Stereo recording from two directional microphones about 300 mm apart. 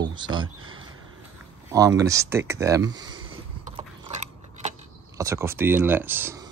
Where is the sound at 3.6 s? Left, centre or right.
Right.